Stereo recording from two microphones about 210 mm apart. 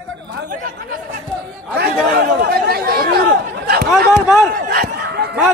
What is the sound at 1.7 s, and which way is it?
Speech, 50° right (ahead or behind).